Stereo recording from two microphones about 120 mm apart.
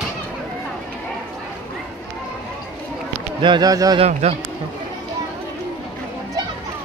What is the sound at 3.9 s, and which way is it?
Speech, 60° right (ahead or behind).